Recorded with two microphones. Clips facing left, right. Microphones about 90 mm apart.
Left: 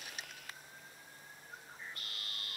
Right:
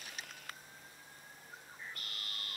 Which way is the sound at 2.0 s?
35° right (ahead or behind).